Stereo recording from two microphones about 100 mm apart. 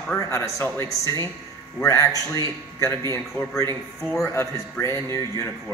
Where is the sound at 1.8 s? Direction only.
35° left (ahead or behind).